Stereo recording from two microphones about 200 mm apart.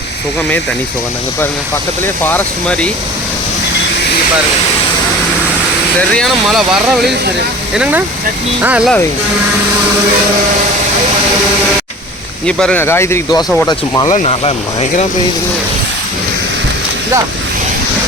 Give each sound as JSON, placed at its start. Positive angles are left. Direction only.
{"t": 2.2, "sound": "speech", "side_deg": 5}
{"t": 6.0, "sound": "speech", "side_deg": 5}
{"t": 12.5, "sound": "speech", "side_deg": 5}
{"t": 14.1, "sound": "speech", "side_deg": 30}